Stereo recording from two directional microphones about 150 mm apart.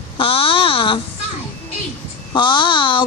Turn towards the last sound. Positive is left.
turn(degrees=30)  # may be behind; listen again after turning